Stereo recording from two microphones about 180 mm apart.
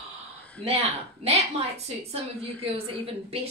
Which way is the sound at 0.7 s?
35° right (ahead or behind).